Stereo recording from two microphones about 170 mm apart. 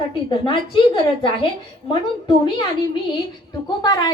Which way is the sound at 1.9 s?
25° left (ahead or behind).